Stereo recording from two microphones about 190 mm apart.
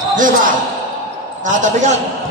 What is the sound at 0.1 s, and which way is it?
A man's voice, 45° right (ahead or behind).